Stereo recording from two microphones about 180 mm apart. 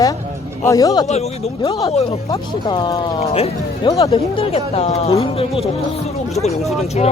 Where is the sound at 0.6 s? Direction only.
20° left (ahead or behind).